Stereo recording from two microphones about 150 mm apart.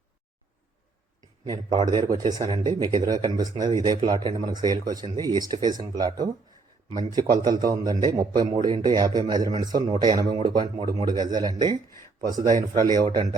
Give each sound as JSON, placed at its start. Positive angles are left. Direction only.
{"t": 1.5, "sound": "speech", "side_deg": -25}